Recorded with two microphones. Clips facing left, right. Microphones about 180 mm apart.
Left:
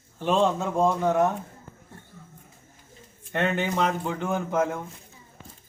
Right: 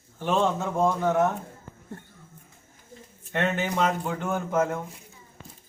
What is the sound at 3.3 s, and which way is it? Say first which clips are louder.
A man's voice: left 1 dB; 5° right (ahead or behind).